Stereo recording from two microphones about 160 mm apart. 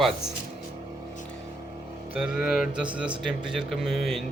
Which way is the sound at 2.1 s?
5° right (ahead or behind).